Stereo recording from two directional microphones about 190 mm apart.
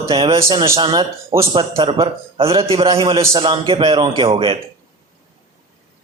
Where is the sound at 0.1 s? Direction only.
25° right (ahead or behind).